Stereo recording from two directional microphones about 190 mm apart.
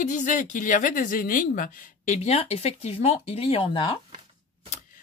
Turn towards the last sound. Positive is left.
turn(degrees=25)  # may be behind; listen again after turning